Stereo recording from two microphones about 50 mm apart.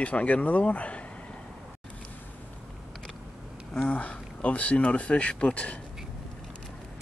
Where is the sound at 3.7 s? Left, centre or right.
Left.